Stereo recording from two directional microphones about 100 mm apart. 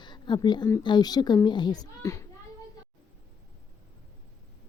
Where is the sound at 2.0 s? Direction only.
30° left (ahead or behind).